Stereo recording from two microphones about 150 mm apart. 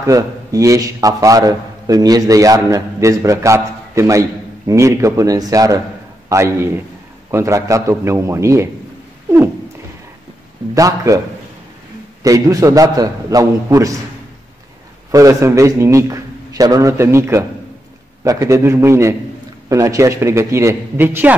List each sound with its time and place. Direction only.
0.0 s a man's voice: 20° right (ahead or behind)
10.7 s a man's voice: 20° right (ahead or behind)
12.2 s a man's voice: 25° right (ahead or behind)
15.0 s a man's voice: 20° right (ahead or behind)